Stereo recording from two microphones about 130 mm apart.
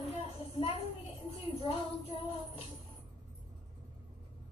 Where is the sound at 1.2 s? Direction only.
45° left (ahead or behind).